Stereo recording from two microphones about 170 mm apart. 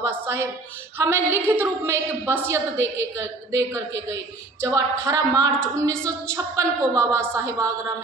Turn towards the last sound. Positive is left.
turn(degrees=-15)  # may be behind; listen again after turning